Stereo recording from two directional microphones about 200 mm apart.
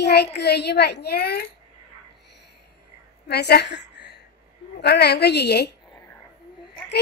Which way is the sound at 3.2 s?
55° left (ahead or behind).